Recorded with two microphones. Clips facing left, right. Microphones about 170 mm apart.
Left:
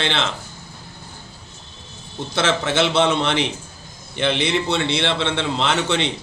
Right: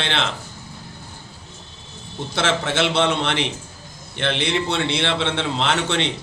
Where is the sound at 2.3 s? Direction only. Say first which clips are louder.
Left 2 dB; 5° left (ahead or behind).